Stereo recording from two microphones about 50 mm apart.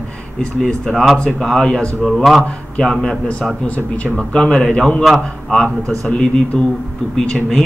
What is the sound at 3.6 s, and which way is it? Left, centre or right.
Speech, left.